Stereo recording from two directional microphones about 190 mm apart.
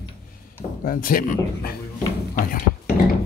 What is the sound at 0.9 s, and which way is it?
Speech, 45° left (ahead or behind).